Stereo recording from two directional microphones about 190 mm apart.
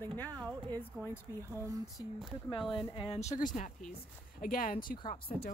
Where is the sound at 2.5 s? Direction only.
25° left (ahead or behind).